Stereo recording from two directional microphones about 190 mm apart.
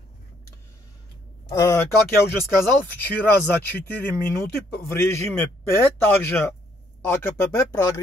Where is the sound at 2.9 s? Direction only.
10° left (ahead or behind).